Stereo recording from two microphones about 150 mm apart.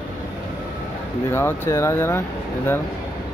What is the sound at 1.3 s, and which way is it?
Speech, 15° left (ahead or behind).